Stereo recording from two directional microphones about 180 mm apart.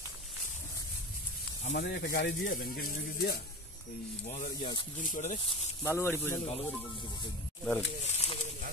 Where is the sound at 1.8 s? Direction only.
60° left (ahead or behind).